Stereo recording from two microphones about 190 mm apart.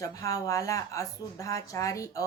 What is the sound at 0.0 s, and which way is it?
A woman's voice, 20° left (ahead or behind).